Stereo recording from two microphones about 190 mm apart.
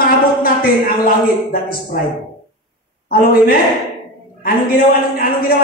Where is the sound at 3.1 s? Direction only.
50° left (ahead or behind).